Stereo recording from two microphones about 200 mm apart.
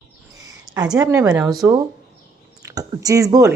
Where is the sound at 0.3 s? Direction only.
20° right (ahead or behind).